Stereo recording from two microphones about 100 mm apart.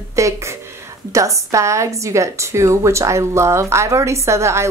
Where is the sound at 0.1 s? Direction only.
30° right (ahead or behind).